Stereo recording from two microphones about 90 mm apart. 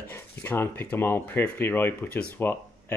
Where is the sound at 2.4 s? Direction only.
25° left (ahead or behind).